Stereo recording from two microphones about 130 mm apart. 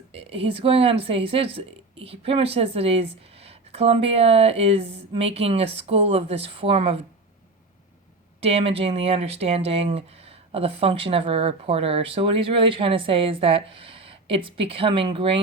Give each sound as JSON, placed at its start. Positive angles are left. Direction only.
{"t": 0.1, "sound": "speech", "side_deg": -50}
{"t": 8.4, "sound": "speech", "side_deg": -50}